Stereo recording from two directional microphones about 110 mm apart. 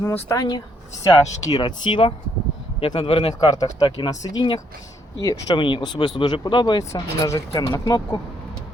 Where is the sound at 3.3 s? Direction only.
35° left (ahead or behind).